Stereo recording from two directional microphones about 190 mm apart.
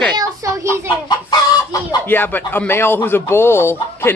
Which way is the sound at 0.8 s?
20° left (ahead or behind).